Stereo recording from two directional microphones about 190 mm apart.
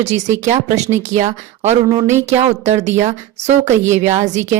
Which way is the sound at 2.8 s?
35° right (ahead or behind).